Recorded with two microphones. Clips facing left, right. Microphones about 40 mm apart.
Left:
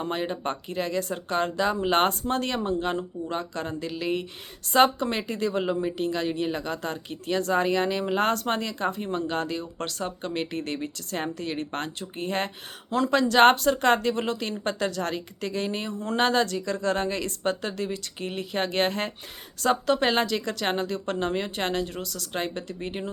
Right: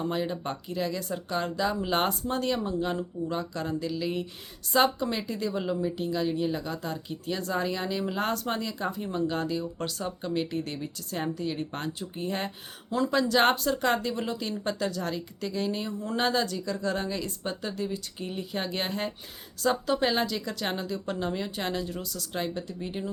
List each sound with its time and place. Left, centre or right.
0.0 s speech: left